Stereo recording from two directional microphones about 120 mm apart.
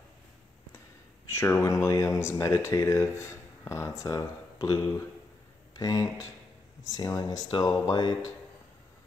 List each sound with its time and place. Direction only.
1.3 s speech: 25° left (ahead or behind)